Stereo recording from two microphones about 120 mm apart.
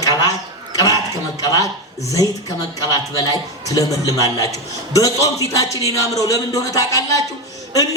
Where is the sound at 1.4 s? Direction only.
30° left (ahead or behind).